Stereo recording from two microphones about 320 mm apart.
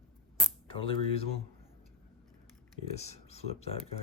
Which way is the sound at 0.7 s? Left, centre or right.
Centre.